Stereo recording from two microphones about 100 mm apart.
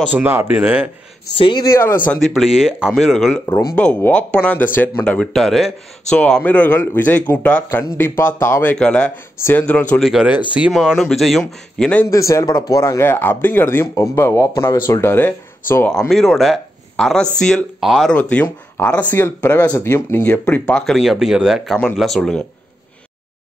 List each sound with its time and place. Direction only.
0.1 s speech: 20° right (ahead or behind)
1.3 s speech: 65° left (ahead or behind)
2.1 s speech: centre (ahead or behind)
7.7 s speech: 25° left (ahead or behind)
8.7 s speech: 10° left (ahead or behind)
9.9 s speech: centre (ahead or behind)
12.1 s a man's voice: 30° left (ahead or behind)
12.8 s speech: 25° left (ahead or behind)
16.1 s speech: centre (ahead or behind)
17.7 s speech: 5° right (ahead or behind)
18.1 s speech: 15° left (ahead or behind)